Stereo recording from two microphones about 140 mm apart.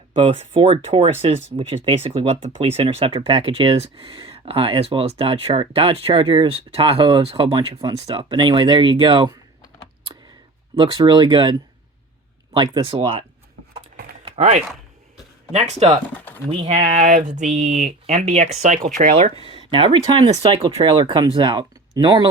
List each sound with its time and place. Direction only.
0.2 s speech: 40° right (ahead or behind)
10.8 s speech: 35° right (ahead or behind)
12.5 s speech: 35° right (ahead or behind)
14.3 s speech: 55° right (ahead or behind)
16.1 s speech: 15° left (ahead or behind)
16.5 s speech: 50° right (ahead or behind)
18.8 s speech: 75° right (ahead or behind)
19.1 s speech: 50° right (ahead or behind)
19.7 s speech: 35° right (ahead or behind)